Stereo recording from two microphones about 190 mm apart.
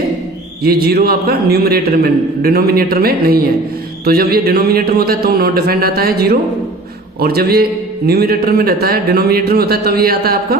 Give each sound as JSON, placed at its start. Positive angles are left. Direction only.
{"t": 0.6, "sound": "a man's voice", "side_deg": -55}